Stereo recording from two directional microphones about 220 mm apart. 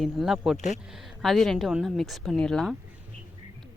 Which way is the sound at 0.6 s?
35° left (ahead or behind).